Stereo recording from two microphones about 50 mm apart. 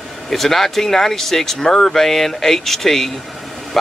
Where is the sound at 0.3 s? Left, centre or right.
Centre.